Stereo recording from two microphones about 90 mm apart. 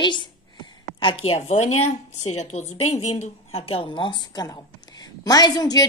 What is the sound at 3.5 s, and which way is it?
Speech, 90° left.